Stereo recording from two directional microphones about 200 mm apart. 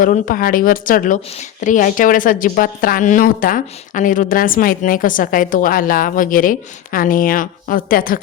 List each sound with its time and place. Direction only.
0.0 s a woman's voice: 40° left (ahead or behind)